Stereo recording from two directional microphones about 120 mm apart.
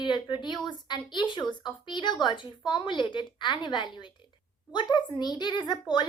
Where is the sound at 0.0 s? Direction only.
40° left (ahead or behind).